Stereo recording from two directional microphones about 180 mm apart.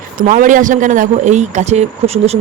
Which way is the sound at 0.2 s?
45° right (ahead or behind).